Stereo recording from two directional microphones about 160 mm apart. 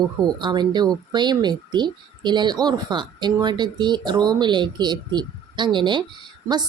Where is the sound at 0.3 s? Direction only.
25° right (ahead or behind).